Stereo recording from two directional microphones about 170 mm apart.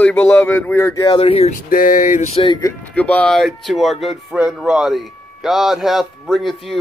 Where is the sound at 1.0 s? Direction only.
30° left (ahead or behind).